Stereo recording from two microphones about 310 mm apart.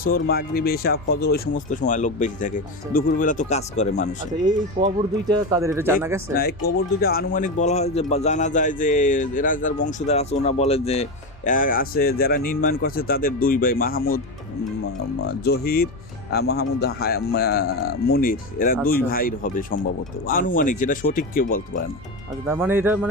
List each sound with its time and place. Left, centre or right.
0.0 s speech: left
0.9 s speech: left
1.2 s speech: left
4.8 s speech: centre
6.3 s speech: left
15.4 s speech: left
22.4 s speech: centre